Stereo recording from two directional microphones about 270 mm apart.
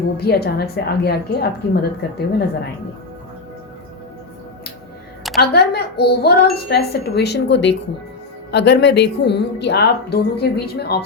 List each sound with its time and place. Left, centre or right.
0.2 s a woman's voice: left
5.4 s a woman's voice: left